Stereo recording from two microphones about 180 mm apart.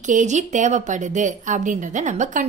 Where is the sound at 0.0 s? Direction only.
45° right (ahead or behind).